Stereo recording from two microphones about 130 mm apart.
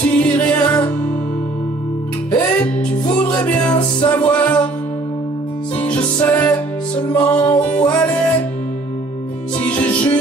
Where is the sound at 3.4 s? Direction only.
10° left (ahead or behind).